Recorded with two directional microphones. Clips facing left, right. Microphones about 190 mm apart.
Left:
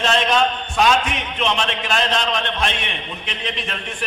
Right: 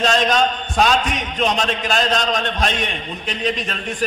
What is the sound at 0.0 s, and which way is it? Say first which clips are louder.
A man's voice: right 1 dB; 40° right (ahead or behind).